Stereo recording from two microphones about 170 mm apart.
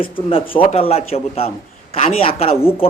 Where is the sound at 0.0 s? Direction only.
30° left (ahead or behind).